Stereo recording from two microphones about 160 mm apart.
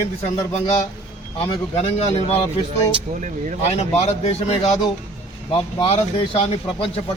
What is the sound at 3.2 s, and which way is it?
Speech, 50° right (ahead or behind).